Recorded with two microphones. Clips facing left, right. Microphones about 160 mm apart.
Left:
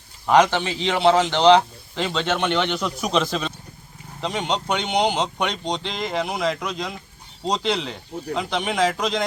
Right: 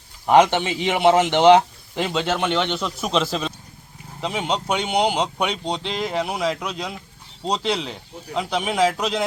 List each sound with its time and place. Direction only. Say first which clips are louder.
0.3 s a man's voice: right 2 dB; 20° right (ahead or behind)